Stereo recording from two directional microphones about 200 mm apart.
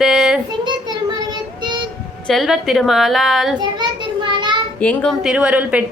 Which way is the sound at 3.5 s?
20° right (ahead or behind).